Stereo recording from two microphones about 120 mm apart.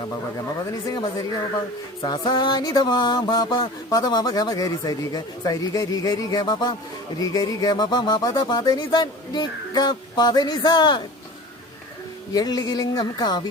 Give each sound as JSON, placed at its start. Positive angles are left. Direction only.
{"t": 2.0, "sound": "music", "side_deg": 35}
{"t": 12.3, "sound": "music", "side_deg": 35}